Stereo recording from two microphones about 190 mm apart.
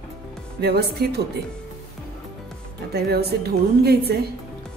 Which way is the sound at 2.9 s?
55° right (ahead or behind).